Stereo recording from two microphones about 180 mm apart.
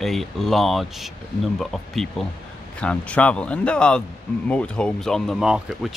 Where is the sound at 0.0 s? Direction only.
Centre (ahead or behind).